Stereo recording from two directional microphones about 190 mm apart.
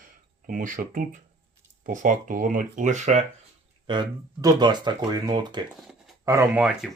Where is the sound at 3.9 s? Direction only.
20° right (ahead or behind).